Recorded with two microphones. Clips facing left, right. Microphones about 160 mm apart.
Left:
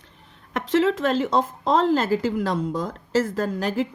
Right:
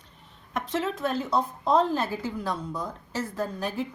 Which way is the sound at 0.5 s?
90° left.